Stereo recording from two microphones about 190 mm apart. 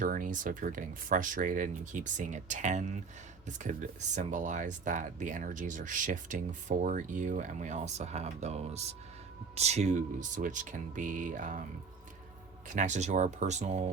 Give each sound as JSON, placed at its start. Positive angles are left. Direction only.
{"t": 0.0, "sound": "speech", "side_deg": -45}
{"t": 4.1, "sound": "speech", "side_deg": -40}
{"t": 12.6, "sound": "speech", "side_deg": -40}